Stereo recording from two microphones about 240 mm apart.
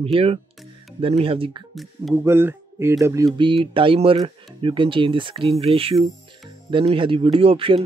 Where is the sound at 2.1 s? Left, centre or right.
Centre.